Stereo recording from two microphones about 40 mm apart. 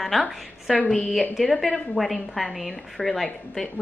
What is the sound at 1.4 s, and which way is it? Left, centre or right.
A woman's voice, centre.